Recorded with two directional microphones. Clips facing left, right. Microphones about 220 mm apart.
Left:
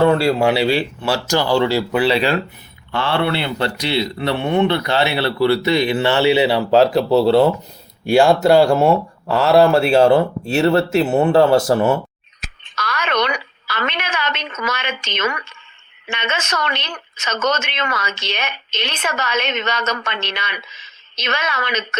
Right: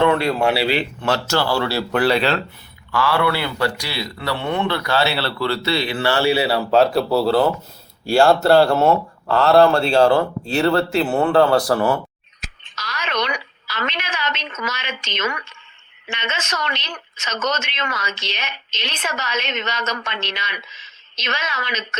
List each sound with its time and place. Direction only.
0.0 s a man's voice: 30° left (ahead or behind)
0.5 s speech: 15° left (ahead or behind)
2.9 s a man's voice: 25° left (ahead or behind)
12.4 s telephone: 55° left (ahead or behind)
16.0 s speech: 60° left (ahead or behind)